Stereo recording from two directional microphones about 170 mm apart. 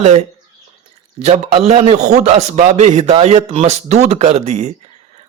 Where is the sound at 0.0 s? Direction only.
40° right (ahead or behind).